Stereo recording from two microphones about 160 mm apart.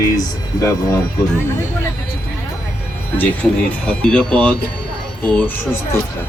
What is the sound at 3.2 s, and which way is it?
Speech, 10° left (ahead or behind).